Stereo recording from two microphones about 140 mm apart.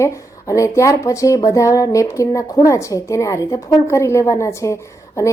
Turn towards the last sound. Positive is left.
turn(degrees=20)  # may be behind; listen again after turning